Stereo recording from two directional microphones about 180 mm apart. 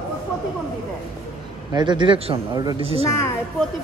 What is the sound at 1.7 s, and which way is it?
Speech, 25° right (ahead or behind).